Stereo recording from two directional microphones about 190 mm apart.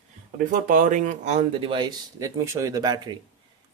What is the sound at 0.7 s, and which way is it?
Speech, 45° right (ahead or behind).